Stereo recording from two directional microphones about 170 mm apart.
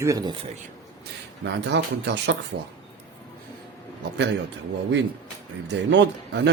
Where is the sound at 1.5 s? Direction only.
90° right.